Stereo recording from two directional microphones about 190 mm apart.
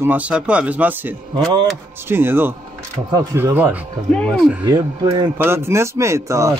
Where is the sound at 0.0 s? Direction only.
10° right (ahead or behind).